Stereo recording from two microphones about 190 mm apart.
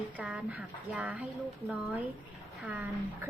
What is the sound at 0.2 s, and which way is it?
A woman's voice, 5° right (ahead or behind).